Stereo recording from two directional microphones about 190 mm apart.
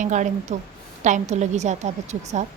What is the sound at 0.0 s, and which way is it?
A woman's voice, 40° right (ahead or behind).